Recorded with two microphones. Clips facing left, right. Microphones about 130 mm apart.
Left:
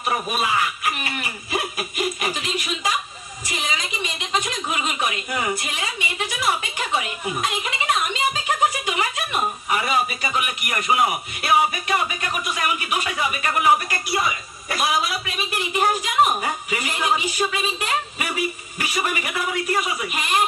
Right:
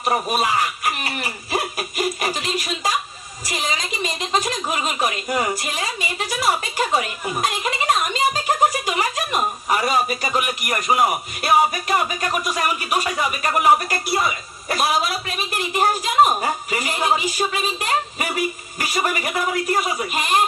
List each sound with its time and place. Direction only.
0.0 s a woman's voice: 35° right (ahead or behind)